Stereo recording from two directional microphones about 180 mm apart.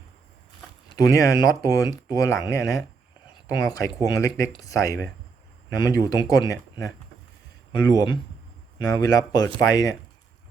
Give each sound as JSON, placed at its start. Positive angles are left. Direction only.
{"t": 0.9, "sound": "speech", "side_deg": 20}